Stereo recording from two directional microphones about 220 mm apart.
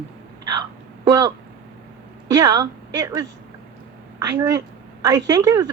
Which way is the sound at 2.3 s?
15° right (ahead or behind).